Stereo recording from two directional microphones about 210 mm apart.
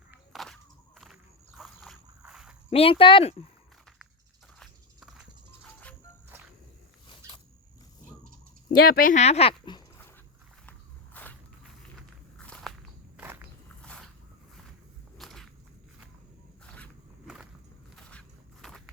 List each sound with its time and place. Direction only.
0.1 s walk: centre (ahead or behind)
2.6 s speech: 25° left (ahead or behind)
4.6 s horse: 5° right (ahead or behind)
8.8 s speech: 45° left (ahead or behind); by 9.8 s 25° left (ahead or behind)
10.7 s walk: 10° left (ahead or behind)
12.4 s walk: 5° left (ahead or behind)
13.1 s walk: 10° right (ahead or behind)
13.8 s a sound: 5° left (ahead or behind)
15.2 s walk: centre (ahead or behind)
16.6 s a sound: 5° left (ahead or behind)
17.9 s walk: 5° left (ahead or behind)